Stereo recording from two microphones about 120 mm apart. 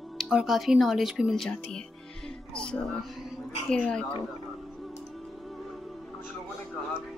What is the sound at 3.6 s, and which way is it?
Speech, 5° left (ahead or behind).